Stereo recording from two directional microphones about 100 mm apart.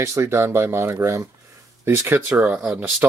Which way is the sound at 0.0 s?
30° right (ahead or behind).